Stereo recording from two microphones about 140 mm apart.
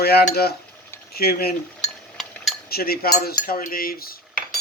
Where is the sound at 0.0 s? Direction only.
90° left.